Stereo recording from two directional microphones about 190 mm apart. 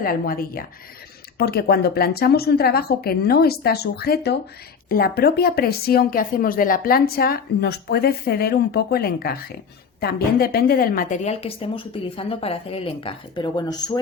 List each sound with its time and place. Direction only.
0.0 s a woman's voice: 50° left (ahead or behind); by 14.0 s 20° left (ahead or behind)